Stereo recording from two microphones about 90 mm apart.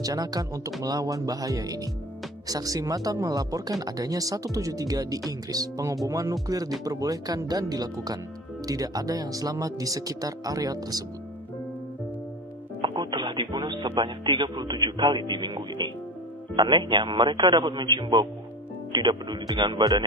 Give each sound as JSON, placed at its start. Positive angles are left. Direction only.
{"t": 0.0, "sound": "speech", "side_deg": -45}
{"t": 12.8, "sound": "music", "side_deg": -55}
{"t": 13.9, "sound": "speech", "side_deg": -60}